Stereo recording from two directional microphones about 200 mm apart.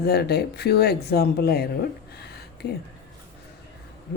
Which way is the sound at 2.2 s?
50° left (ahead or behind).